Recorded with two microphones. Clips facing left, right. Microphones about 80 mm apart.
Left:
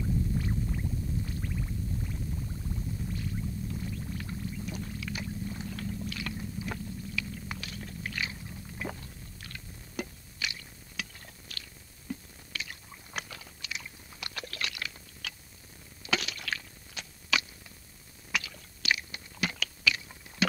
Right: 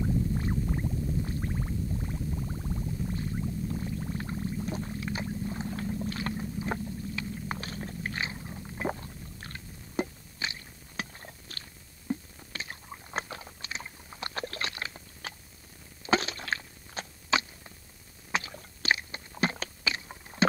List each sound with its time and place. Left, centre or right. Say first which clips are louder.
0.0 s stomach rumble: right 2 dB; right
12.1 s biting: right 5 dB; right
16.0 s a sound: right 6 dB; right
18.3 s chewing: right 3 dB; right